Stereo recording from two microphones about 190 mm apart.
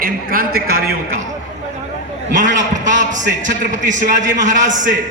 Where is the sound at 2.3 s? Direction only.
40° right (ahead or behind).